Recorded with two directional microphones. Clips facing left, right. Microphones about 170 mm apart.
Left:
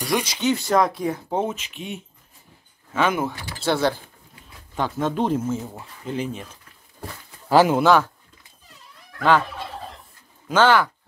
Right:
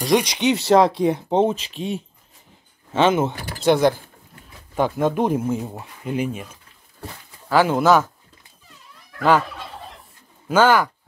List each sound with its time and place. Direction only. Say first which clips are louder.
0.0 s speech: right 4 dB; 20° right (ahead or behind)
7.0 s a sound: even; 15° left (ahead or behind)
7.7 s speech: right 1 dB; 5° right (ahead or behind)
10.5 s speech: right 1 dB; 10° right (ahead or behind)